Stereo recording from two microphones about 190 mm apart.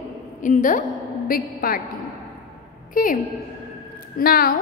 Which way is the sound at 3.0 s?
45° left (ahead or behind).